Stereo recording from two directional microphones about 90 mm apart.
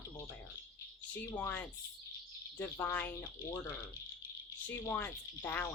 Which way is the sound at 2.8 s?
20° left (ahead or behind).